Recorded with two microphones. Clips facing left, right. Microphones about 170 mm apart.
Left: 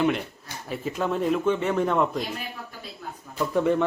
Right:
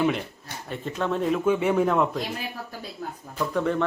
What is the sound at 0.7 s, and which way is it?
A man's voice, 5° left (ahead or behind).